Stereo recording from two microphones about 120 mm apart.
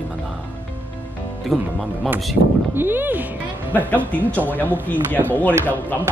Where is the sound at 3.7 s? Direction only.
15° left (ahead or behind).